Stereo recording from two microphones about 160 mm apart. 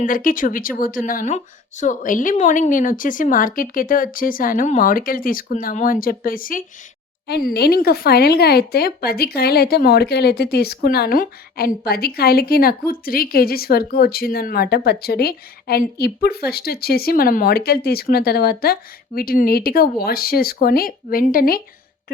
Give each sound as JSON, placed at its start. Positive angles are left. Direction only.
{"t": 0.0, "sound": "speech", "side_deg": 60}
{"t": 7.3, "sound": "a woman's voice", "side_deg": 80}